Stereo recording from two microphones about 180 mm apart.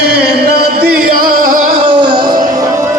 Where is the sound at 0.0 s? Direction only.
60° right (ahead or behind).